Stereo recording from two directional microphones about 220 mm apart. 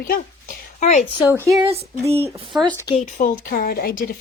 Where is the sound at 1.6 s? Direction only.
25° right (ahead or behind).